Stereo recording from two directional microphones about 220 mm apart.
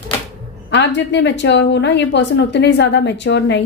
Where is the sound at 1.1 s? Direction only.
55° left (ahead or behind).